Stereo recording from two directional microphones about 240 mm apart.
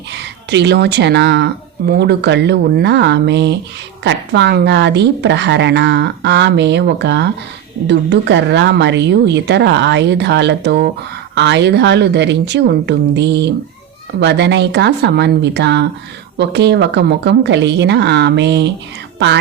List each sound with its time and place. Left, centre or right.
0.1 s a woman's voice: right